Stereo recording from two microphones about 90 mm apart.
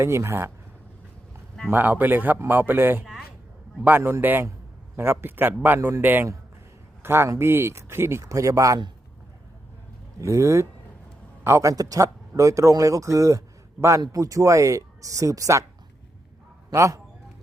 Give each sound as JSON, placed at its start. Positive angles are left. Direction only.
{"t": 0.0, "sound": "a man's voice", "side_deg": -30}
{"t": 1.7, "sound": "a man's voice", "side_deg": -20}
{"t": 10.2, "sound": "speech", "side_deg": -30}
{"t": 16.7, "sound": "speech", "side_deg": -35}